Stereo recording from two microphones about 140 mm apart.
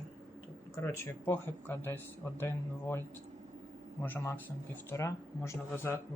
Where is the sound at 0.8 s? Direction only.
20° left (ahead or behind).